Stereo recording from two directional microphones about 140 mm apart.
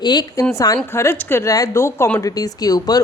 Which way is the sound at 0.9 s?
20° left (ahead or behind).